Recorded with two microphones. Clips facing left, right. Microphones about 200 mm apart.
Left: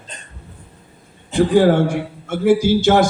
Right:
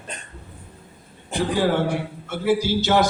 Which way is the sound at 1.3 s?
50° left (ahead or behind).